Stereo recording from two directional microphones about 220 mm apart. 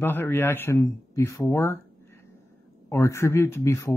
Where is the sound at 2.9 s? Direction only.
10° left (ahead or behind).